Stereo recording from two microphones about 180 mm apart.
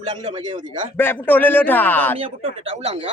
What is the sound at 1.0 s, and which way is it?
A man's voice, 10° left (ahead or behind).